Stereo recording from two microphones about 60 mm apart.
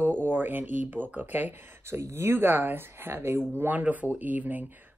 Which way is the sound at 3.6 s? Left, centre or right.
Right.